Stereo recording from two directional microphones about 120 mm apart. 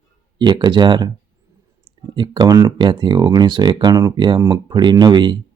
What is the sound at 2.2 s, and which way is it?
Speech, 35° right (ahead or behind).